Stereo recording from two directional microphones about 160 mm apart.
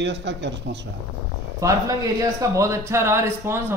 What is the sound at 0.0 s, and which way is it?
Speech, 90° right.